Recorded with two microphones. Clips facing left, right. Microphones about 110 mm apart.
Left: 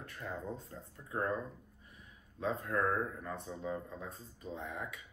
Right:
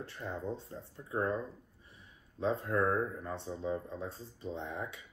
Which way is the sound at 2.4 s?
30° right (ahead or behind).